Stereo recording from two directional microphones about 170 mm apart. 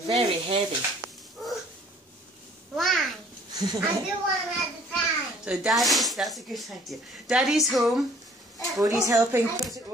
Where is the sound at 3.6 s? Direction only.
25° right (ahead or behind).